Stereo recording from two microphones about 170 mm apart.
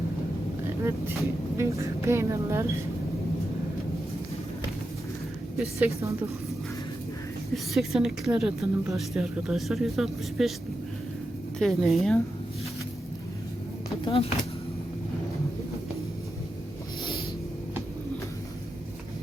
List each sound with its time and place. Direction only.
0.9 s a woman's voice: 15° right (ahead or behind)
5.8 s a woman's voice: 15° right (ahead or behind)
7.5 s speech: centre (ahead or behind)
11.6 s speech: centre (ahead or behind)
14.0 s speech: 35° left (ahead or behind)